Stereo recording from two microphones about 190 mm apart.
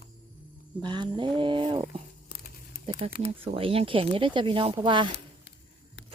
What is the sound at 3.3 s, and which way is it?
Speech, 30° right (ahead or behind).